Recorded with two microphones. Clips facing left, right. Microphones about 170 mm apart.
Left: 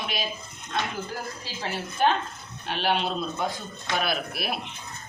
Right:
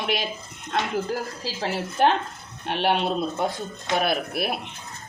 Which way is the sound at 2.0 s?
75° right (ahead or behind).